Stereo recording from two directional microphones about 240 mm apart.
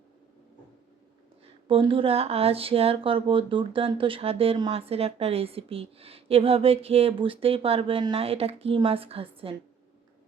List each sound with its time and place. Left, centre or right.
1.6 s speech: right